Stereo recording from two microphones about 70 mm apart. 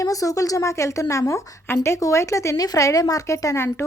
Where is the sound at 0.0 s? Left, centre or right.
Left.